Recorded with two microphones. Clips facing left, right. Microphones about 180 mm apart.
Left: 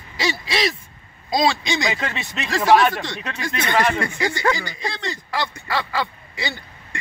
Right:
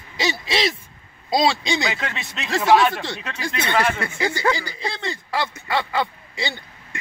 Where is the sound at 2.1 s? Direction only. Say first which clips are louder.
Left 1 dB; centre (ahead or behind).